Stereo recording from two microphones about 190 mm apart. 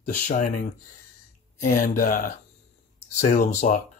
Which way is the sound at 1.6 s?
45° left (ahead or behind).